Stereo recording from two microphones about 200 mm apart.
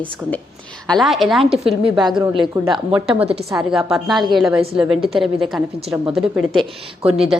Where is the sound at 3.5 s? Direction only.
Centre (ahead or behind).